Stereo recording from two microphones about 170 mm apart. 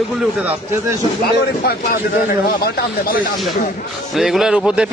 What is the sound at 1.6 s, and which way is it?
A man's voice, 65° left (ahead or behind).